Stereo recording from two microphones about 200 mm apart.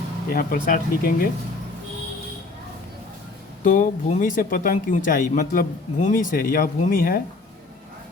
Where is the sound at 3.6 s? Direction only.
40° left (ahead or behind).